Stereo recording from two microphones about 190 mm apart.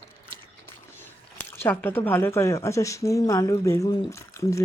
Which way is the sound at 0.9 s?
10° left (ahead or behind).